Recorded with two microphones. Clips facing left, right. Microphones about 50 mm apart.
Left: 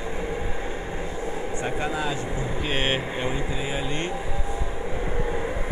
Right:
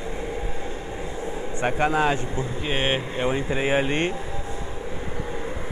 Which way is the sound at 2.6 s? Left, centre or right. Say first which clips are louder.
Right 1 dB; centre.